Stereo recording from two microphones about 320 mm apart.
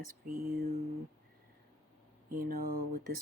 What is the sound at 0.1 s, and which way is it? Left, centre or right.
Speech, right.